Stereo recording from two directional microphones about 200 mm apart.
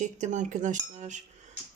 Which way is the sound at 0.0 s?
40° right (ahead or behind).